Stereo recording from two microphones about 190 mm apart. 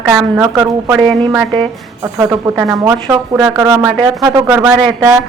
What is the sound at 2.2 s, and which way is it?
Speech, 20° right (ahead or behind).